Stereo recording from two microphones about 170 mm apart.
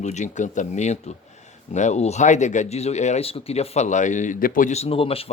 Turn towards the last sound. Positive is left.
turn(degrees=35)  # may be behind; listen again after turning